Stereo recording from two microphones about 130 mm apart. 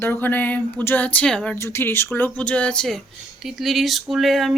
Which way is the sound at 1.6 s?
20° left (ahead or behind).